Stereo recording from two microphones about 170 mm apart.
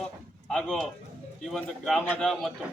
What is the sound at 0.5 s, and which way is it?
Speech, centre (ahead or behind).